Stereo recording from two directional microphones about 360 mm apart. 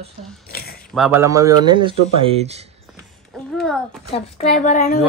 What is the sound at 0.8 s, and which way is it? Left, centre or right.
Speech, centre.